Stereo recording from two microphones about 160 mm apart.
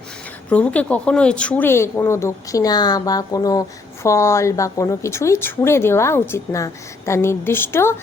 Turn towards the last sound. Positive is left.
turn(degrees=15)  # may be behind; listen again after turning